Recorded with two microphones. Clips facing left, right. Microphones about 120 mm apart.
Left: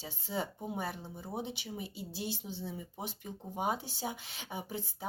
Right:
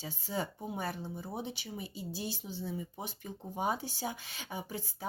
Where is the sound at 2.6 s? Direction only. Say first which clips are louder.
Right 2 dB; 20° left (ahead or behind).